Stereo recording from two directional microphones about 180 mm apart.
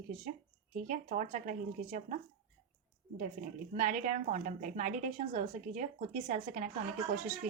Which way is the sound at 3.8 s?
45° right (ahead or behind).